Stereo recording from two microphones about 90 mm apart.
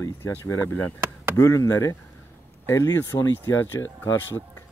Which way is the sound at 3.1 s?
55° left (ahead or behind).